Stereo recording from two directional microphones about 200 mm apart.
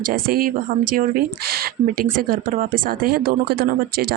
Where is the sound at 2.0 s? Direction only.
45° right (ahead or behind).